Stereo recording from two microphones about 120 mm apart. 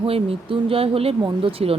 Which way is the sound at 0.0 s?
50° right (ahead or behind).